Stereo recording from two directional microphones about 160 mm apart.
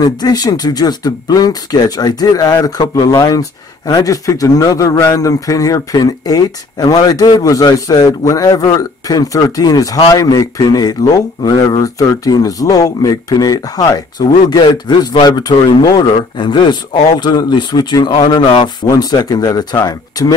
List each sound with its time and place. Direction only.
0.0 s speech: 25° left (ahead or behind)